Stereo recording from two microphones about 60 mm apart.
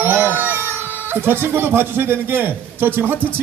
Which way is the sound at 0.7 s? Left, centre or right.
Right.